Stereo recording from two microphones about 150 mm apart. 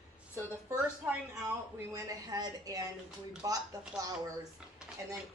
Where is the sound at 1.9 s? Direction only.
20° right (ahead or behind).